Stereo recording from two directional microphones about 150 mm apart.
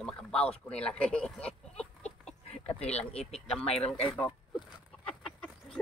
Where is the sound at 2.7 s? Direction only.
45° left (ahead or behind).